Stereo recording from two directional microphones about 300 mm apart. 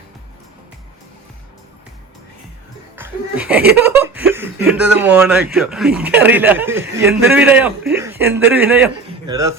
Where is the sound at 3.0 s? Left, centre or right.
Centre.